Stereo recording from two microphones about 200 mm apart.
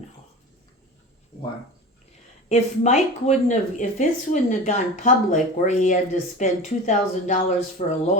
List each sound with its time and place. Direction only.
2.5 s speech: 35° left (ahead or behind)